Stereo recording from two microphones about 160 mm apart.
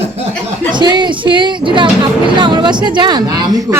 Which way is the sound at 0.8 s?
30° right (ahead or behind).